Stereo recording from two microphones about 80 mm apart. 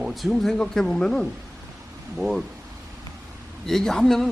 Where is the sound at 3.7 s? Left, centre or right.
Centre.